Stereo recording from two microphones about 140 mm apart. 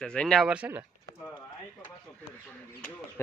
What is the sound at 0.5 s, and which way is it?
Speech, 10° right (ahead or behind).